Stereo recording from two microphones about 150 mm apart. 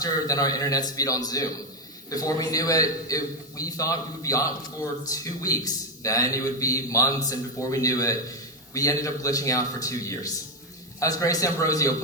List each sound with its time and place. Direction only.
0.0 s a man's voice: 25° left (ahead or behind)